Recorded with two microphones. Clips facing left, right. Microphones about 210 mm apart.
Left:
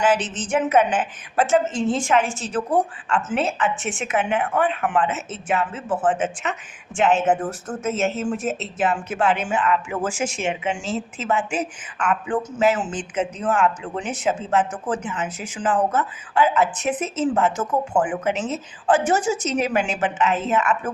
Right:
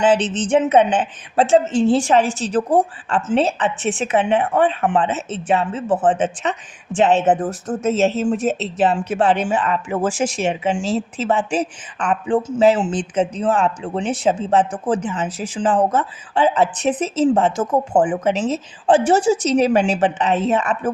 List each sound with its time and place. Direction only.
0.3 s a woman's voice: 30° right (ahead or behind)